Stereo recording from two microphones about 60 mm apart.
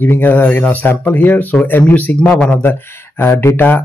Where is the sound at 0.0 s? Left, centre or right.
Left.